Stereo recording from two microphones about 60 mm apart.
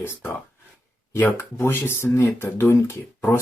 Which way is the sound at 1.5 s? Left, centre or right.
Left.